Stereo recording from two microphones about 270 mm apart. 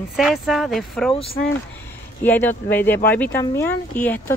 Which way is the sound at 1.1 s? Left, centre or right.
Left.